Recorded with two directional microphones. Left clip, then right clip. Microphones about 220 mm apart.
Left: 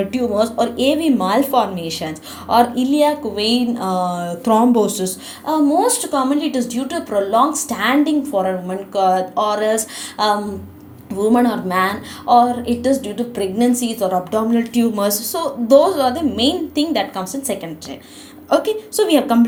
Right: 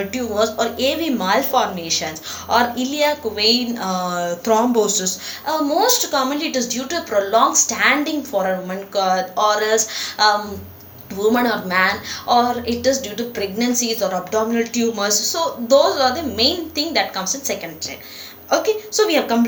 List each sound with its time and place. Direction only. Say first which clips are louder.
0.1 s a woman's voice: left 2 dB; 35° left (ahead or behind)